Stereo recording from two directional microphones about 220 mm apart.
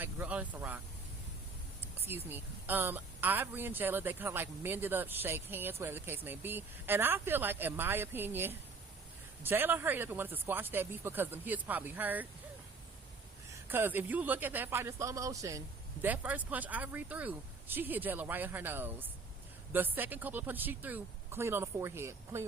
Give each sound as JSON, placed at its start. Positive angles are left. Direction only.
{"t": 0.0, "sound": "speech", "side_deg": -5}
{"t": 1.8, "sound": "speech", "side_deg": -10}
{"t": 13.7, "sound": "speech", "side_deg": -10}